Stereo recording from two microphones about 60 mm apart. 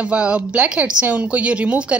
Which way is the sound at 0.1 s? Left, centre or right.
Right.